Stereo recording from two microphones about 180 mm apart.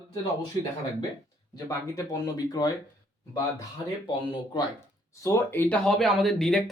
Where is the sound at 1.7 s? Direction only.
20° left (ahead or behind).